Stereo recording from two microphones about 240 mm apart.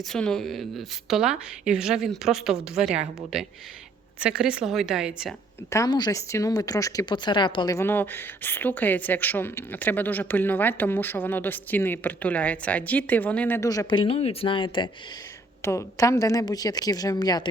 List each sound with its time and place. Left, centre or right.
0.0 s a woman's voice: centre
4.2 s a woman's voice: centre
5.7 s speech: centre